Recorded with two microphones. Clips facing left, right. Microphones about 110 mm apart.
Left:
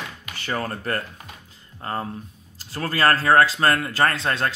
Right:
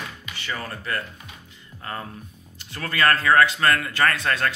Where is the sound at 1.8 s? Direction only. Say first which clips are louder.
Left 5 dB; 35° left (ahead or behind).